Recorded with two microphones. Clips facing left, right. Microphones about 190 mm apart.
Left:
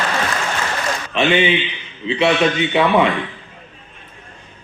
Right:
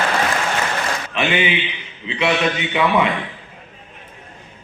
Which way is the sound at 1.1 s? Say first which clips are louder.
Left 5 dB; 25° left (ahead or behind).